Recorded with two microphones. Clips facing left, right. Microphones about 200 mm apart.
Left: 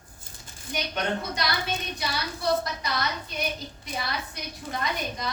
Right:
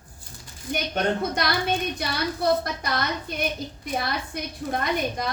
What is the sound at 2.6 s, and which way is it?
A woman's voice, 55° right (ahead or behind).